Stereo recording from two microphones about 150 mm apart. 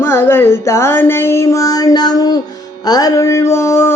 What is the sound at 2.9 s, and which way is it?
Music, 25° left (ahead or behind).